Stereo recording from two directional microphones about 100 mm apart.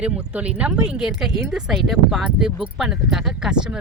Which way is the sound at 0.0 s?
15° right (ahead or behind).